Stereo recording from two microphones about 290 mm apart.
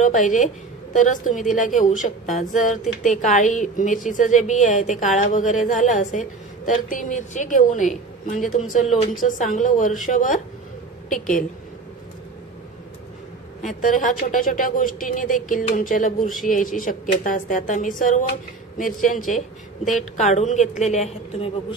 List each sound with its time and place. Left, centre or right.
0.0 s a woman's voice: left
13.6 s a woman's voice: left
19.8 s a woman's voice: centre
20.2 s a woman's voice: left